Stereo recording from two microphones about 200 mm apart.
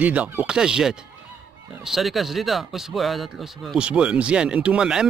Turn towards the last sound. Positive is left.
turn(degrees=-5)  # may be behind; listen again after turning